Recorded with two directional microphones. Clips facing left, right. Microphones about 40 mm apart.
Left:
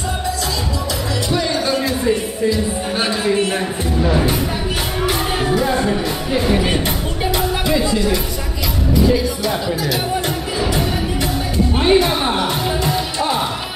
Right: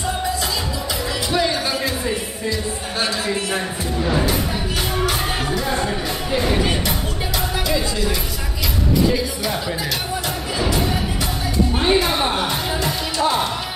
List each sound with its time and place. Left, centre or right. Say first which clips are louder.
1.3 s music: left 2 dB; centre
3.0 s speech: left 4 dB; left
5.6 s music: left 5 dB; centre
7.3 s music: left 3 dB; centre
8.9 s music: left 3 dB; centre